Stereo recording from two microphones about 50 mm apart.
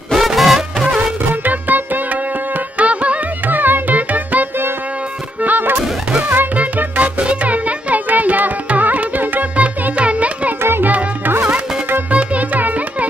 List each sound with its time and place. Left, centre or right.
0.1 s music: centre
0.9 s music: right
2.8 s music: right
10.6 s music: right
10.9 s music: right